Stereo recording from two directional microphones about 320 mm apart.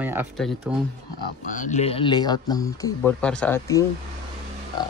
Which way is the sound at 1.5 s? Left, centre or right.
Left.